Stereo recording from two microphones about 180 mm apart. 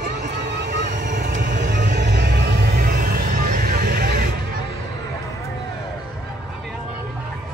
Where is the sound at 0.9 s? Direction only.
45° right (ahead or behind).